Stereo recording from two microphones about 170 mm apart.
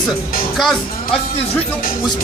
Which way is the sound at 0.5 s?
Centre (ahead or behind).